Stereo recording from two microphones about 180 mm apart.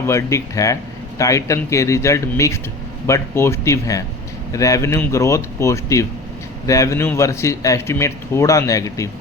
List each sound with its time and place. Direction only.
0.0 s a man's voice: 15° left (ahead or behind)